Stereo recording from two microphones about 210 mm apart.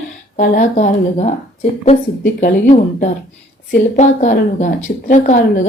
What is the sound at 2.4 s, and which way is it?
A woman's voice, 35° left (ahead or behind).